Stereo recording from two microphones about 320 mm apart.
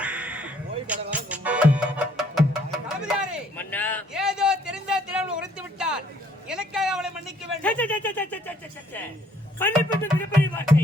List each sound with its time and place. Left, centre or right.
0.0 s music: centre
3.0 s a sound: centre
9.6 s speech: centre